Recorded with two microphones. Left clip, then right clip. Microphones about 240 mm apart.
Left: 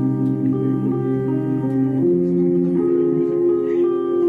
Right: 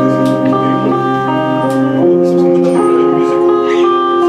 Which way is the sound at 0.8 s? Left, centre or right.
Centre.